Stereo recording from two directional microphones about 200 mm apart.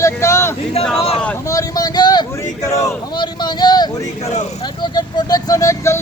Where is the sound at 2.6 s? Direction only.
15° left (ahead or behind).